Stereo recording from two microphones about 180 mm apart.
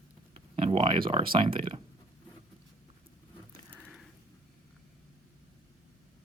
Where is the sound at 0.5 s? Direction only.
35° right (ahead or behind).